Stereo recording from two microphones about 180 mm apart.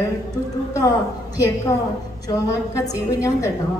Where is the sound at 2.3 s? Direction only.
20° left (ahead or behind).